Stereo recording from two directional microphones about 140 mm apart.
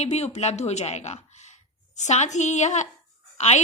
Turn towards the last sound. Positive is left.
turn(degrees=55)  # may be behind; listen again after turning